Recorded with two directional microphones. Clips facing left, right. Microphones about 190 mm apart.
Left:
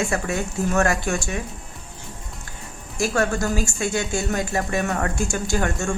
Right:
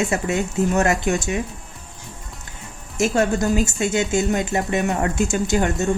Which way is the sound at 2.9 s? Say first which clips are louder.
Right 3 dB; 20° right (ahead or behind).